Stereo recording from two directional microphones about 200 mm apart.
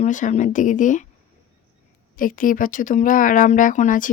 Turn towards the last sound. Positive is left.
turn(degrees=40)  # may be behind; listen again after turning